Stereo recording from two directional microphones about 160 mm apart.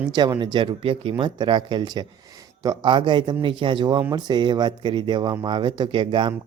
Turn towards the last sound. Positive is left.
turn(degrees=-30)  # may be behind; listen again after turning